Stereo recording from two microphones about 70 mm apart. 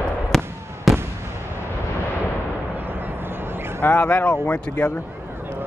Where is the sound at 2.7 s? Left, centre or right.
Right.